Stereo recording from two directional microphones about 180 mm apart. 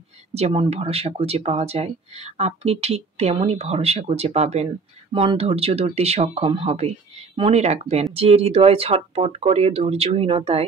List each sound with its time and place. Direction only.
0.3 s speech: 35° right (ahead or behind)